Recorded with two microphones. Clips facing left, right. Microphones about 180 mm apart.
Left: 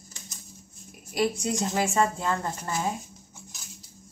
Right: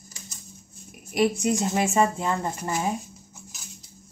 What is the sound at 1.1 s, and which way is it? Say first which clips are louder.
A woman's voice: right 4 dB; 20° right (ahead or behind).